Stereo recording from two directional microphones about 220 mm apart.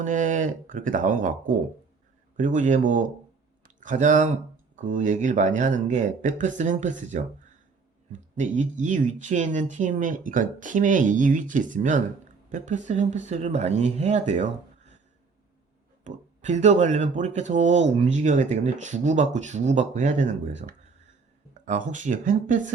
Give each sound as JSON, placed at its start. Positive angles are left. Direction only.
{"t": 0.0, "sound": "speech", "side_deg": -35}
{"t": 3.6, "sound": "a sound", "side_deg": -35}
{"t": 4.8, "sound": "speech", "side_deg": -35}
{"t": 16.0, "sound": "speech", "side_deg": -35}